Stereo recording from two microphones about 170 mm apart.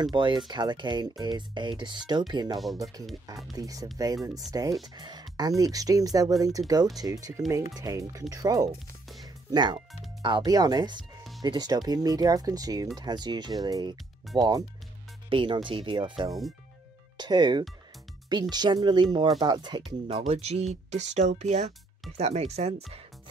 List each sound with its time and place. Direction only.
0.0 s speech: 25° right (ahead or behind)
9.2 s music: 25° right (ahead or behind)
10.2 s speech: 25° right (ahead or behind)
20.1 s speech: 35° right (ahead or behind)